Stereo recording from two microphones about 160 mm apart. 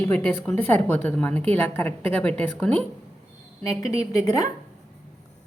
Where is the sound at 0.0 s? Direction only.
10° left (ahead or behind).